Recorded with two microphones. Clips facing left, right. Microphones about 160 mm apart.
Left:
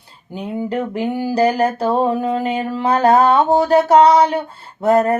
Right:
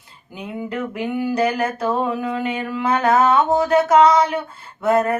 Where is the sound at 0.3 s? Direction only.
35° left (ahead or behind).